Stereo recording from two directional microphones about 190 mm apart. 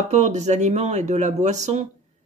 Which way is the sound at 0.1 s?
35° right (ahead or behind).